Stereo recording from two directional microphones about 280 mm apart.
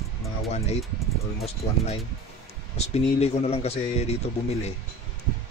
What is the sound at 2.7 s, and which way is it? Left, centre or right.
Speech, left.